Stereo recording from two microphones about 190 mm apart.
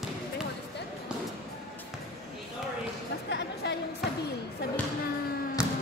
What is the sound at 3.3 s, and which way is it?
Chatter, 65° left (ahead or behind).